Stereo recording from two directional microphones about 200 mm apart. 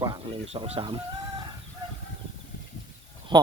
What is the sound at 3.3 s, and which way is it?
Speech, 20° right (ahead or behind).